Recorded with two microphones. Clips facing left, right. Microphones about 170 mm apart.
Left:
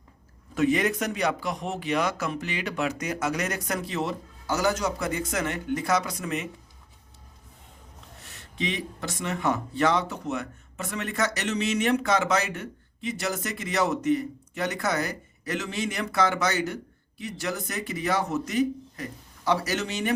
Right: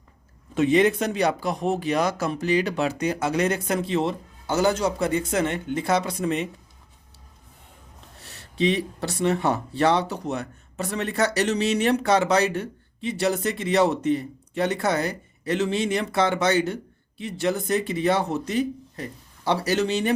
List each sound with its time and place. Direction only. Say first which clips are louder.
0.5 s speech: right 5 dB; 25° right (ahead or behind)
8.4 s speech: right 8 dB; 35° right (ahead or behind)